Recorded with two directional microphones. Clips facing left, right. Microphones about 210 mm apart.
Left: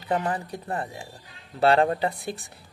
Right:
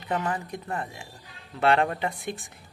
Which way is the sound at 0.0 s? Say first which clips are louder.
Left 2 dB; 35° left (ahead or behind).